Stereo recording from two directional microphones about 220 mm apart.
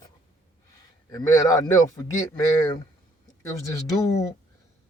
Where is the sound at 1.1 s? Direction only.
15° left (ahead or behind).